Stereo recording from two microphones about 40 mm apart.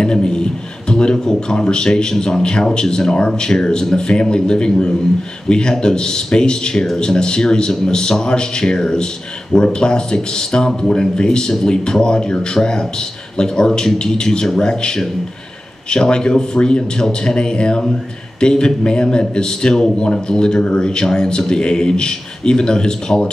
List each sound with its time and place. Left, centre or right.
0.0 s a man's voice: centre